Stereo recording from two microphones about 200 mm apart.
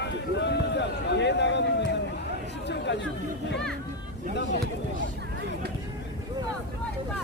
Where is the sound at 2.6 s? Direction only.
60° left (ahead or behind).